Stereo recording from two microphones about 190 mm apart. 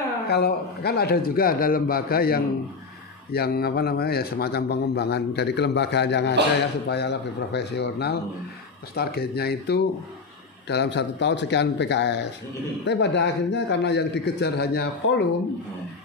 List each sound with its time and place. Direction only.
0.3 s a man's voice: 55° left (ahead or behind)